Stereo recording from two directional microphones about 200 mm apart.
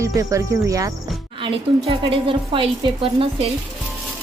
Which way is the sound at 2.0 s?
25° right (ahead or behind).